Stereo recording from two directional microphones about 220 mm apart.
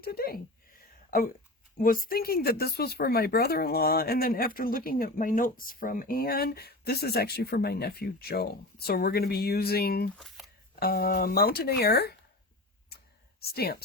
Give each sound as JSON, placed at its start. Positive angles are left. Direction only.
{"t": 0.0, "sound": "speech", "side_deg": 45}
{"t": 1.8, "sound": "speech", "side_deg": 40}
{"t": 10.2, "sound": "shuffling cards", "side_deg": 0}
{"t": 10.8, "sound": "speech", "side_deg": 45}
{"t": 12.9, "sound": "clicking", "side_deg": 45}
{"t": 13.4, "sound": "speech", "side_deg": 45}